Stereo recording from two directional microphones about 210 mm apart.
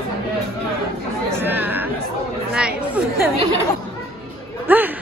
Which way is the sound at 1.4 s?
10° right (ahead or behind).